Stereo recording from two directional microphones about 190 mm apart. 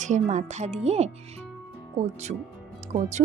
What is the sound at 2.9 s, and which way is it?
Speech, 40° right (ahead or behind).